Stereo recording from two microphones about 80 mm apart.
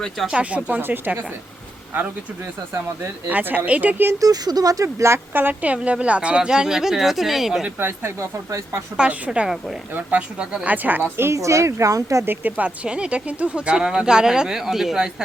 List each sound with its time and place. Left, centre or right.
0.3 s speech: centre
3.0 s speech: right
4.2 s speech: right; by 7.6 s centre
7.8 s speech: right
8.2 s speech: right
9.0 s speech: centre
11.2 s speech: right
12.2 s speech: right; by 15.1 s centre